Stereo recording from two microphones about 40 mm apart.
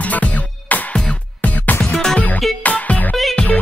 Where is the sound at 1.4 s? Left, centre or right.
Left.